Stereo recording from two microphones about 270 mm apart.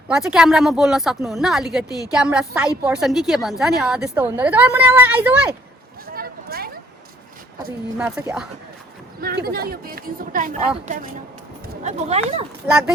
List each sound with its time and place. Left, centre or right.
0.1 s speech: centre
6.1 s a sound: right
7.9 s speech: centre
9.2 s speech: right
11.8 s speech: right